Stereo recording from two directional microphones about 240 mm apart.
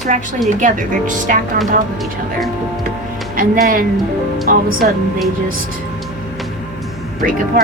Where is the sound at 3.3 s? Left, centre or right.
Right.